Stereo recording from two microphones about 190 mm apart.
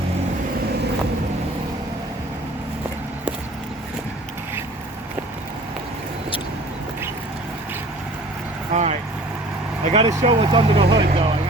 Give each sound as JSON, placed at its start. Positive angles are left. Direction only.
{"t": 8.7, "sound": "vehicle", "side_deg": -35}
{"t": 10.2, "sound": "speech", "side_deg": -25}